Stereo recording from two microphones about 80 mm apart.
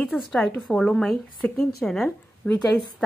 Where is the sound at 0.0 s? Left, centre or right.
Centre.